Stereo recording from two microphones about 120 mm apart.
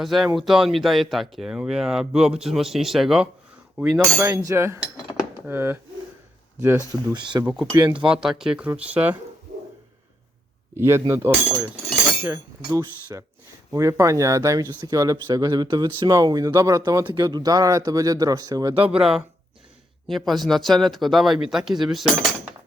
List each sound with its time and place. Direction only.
0.0 s speech: centre (ahead or behind)
4.2 s speech: 25° right (ahead or behind)
7.1 s speech: 40° right (ahead or behind)
8.0 s speech: 5° right (ahead or behind)
10.8 s speech: 20° right (ahead or behind)
18.9 s speech: 5° right (ahead or behind)